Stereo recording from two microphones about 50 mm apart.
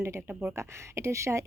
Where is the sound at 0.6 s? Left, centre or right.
Right.